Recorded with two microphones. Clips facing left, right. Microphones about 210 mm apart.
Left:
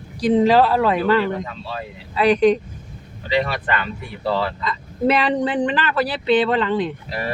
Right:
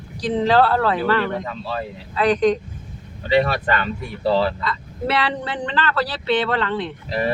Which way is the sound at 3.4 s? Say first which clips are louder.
Right 2 dB; 40° right (ahead or behind).